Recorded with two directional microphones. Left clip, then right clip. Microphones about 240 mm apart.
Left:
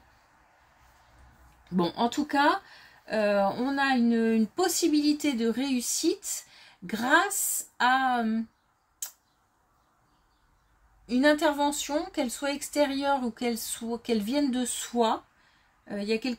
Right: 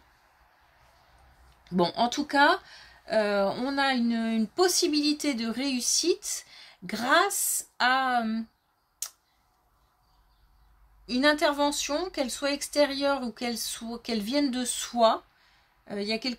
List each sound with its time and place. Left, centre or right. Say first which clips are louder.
1.6 s speech: right 2 dB; right
11.1 s speech: even; right